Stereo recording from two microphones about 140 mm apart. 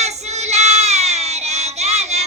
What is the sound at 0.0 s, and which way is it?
Child singing, 50° right (ahead or behind).